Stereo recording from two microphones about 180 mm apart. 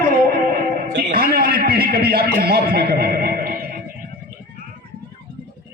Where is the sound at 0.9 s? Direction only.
55° right (ahead or behind).